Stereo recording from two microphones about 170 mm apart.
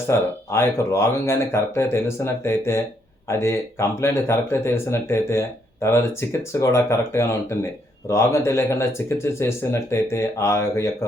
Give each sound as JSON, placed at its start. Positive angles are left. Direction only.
{"t": 0.1, "sound": "speech", "side_deg": 15}